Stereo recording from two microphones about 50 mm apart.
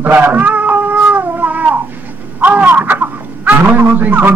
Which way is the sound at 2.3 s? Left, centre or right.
Right.